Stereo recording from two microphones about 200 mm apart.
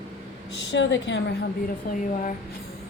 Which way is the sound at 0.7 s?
65° left (ahead or behind).